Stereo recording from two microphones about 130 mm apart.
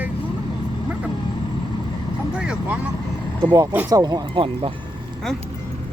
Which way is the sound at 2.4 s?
5° right (ahead or behind).